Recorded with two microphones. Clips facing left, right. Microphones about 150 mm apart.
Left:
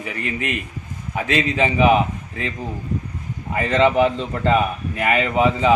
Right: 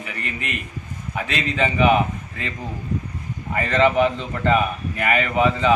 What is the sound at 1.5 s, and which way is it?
Speech, 15° left (ahead or behind).